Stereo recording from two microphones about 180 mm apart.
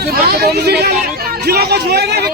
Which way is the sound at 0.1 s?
65° right (ahead or behind).